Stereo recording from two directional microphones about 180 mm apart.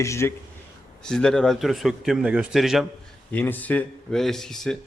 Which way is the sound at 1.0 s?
5° left (ahead or behind).